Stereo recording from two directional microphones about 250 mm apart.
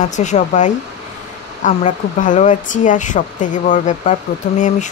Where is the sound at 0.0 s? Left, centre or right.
Left.